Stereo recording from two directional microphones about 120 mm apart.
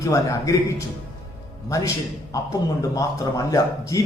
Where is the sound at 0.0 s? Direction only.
25° left (ahead or behind).